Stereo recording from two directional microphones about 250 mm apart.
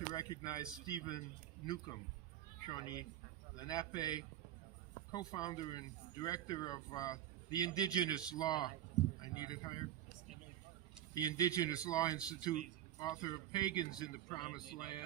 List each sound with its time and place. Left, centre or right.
0.1 s speech: centre
11.1 s speech: centre